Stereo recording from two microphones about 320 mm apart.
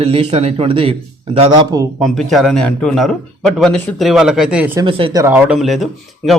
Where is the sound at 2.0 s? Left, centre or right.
Centre.